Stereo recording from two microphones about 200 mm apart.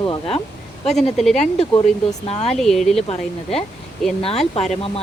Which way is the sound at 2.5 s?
Centre (ahead or behind).